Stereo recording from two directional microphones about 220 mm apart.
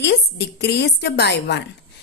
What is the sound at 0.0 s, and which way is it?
Speech, 50° left (ahead or behind).